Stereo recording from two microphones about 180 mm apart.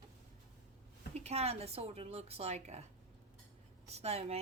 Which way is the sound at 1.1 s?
35° right (ahead or behind).